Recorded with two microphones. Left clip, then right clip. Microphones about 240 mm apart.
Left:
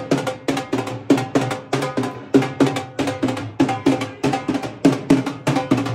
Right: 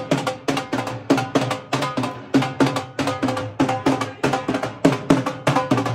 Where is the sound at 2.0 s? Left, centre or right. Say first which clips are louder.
Left 3 dB; centre.